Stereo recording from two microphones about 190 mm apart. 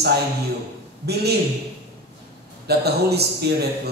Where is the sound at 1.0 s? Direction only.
60° right (ahead or behind).